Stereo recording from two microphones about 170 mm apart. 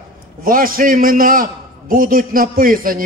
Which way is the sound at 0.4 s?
55° right (ahead or behind).